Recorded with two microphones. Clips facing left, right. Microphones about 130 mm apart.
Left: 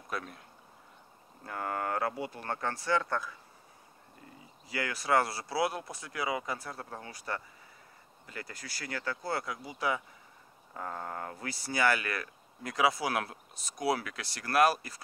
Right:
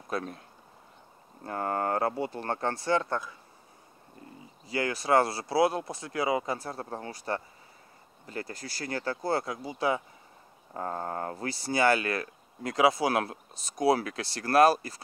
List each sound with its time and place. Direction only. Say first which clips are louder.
0.1 s speech: right 5 dB; 35° right (ahead or behind)
1.4 s speech: right 5 dB; 35° right (ahead or behind)
4.6 s speech: right 4 dB; 25° right (ahead or behind)